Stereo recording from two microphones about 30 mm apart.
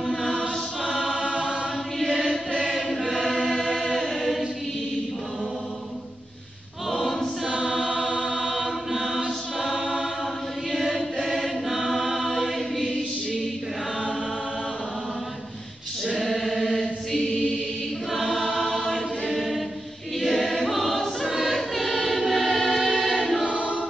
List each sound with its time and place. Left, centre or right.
1.3 s choir: right
2.6 s chant: centre
6.9 s choir: centre
7.7 s chant: centre
8.1 s chant: right
8.5 s choir: centre
10.7 s chant: centre
11.2 s choir: centre
12.4 s chant: centre
16.3 s chant: centre
16.6 s chant: centre
18.1 s choir: centre